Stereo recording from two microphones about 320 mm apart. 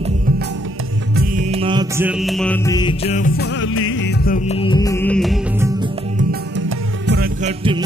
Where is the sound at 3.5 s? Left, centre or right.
Left.